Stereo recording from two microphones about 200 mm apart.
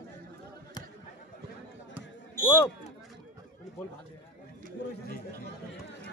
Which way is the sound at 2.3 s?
10° left (ahead or behind).